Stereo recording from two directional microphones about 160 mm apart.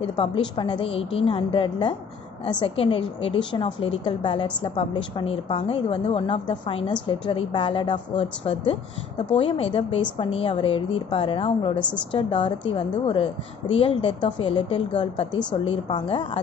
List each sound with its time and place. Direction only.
0.0 s a woman's voice: 30° left (ahead or behind)
11.8 s a woman's voice: 10° left (ahead or behind)
12.1 s a woman's voice: 30° left (ahead or behind)